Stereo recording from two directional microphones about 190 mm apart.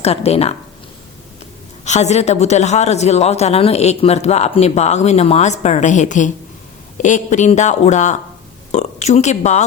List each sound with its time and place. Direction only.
0.0 s a man's voice: 35° left (ahead or behind)
1.8 s a man's voice: 35° left (ahead or behind)